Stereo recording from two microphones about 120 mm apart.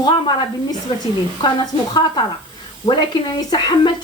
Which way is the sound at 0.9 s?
40° left (ahead or behind).